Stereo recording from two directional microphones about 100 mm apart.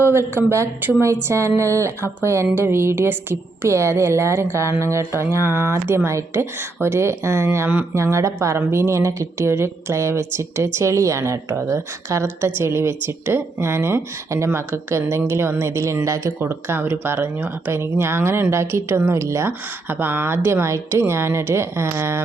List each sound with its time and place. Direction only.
0.0 s speech: 25° right (ahead or behind)